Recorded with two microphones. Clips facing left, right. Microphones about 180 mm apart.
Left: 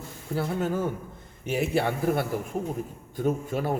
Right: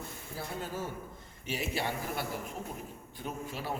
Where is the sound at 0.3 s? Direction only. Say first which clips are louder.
Left 11 dB; 65° left (ahead or behind).